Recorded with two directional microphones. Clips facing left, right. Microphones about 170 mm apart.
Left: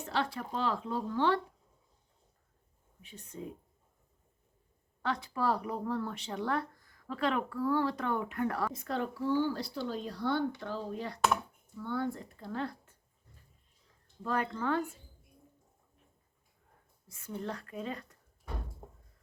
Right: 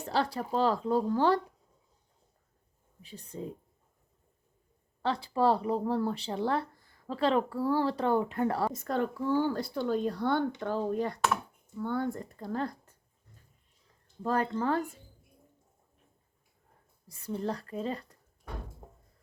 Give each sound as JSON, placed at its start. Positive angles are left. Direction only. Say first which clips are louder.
{"t": 0.0, "sound": "speech", "louder": "right 4 dB", "side_deg": -35}
{"t": 3.0, "sound": "speech", "louder": "right 4 dB", "side_deg": -35}
{"t": 5.0, "sound": "speech", "louder": "right 5 dB", "side_deg": -30}
{"t": 8.7, "sound": "speech", "louder": "right 4 dB", "side_deg": -45}
{"t": 14.2, "sound": "speech", "louder": "right 4 dB", "side_deg": -35}
{"t": 17.1, "sound": "speech", "louder": "right 5 dB", "side_deg": -35}